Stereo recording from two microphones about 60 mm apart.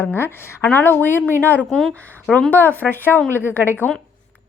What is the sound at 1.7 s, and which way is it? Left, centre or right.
Speech, centre.